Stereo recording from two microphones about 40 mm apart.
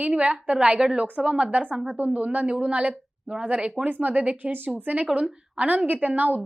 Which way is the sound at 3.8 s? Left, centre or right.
Right.